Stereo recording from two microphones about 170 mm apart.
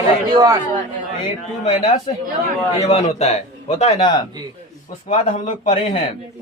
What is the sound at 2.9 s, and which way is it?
Speech, 40° left (ahead or behind).